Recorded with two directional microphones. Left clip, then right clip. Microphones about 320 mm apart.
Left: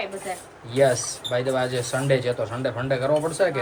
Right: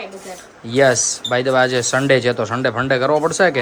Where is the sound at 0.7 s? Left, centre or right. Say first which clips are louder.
Right 6 dB; right.